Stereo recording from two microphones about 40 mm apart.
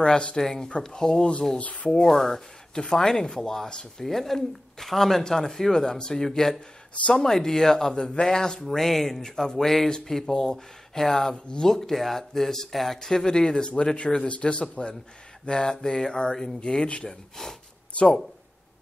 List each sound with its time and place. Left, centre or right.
0.0 s speech: left
0.4 s speech: centre
0.7 s speech: left
1.6 s speech: left
2.0 s speech: centre; by 18.2 s left